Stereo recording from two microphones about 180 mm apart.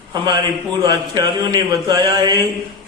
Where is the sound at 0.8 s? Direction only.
25° right (ahead or behind).